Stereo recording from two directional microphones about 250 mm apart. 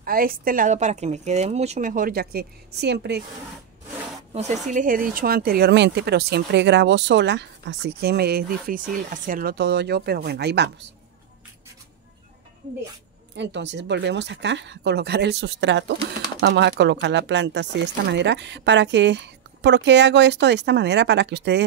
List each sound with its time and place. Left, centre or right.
0.0 s speech: right
4.3 s speech: right
13.4 s speech: right